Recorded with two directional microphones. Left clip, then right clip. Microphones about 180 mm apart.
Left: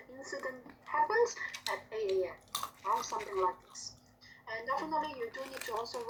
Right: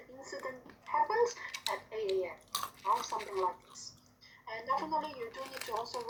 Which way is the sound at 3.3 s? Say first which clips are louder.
Left 3 dB; 15° left (ahead or behind).